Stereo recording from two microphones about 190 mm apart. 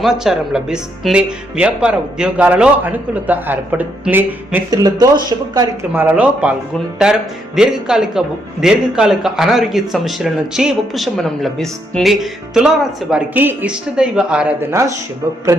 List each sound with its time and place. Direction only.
0.0 s speech: 5° right (ahead or behind)
4.8 s speech: 20° right (ahead or behind)
14.7 s speech: 15° right (ahead or behind)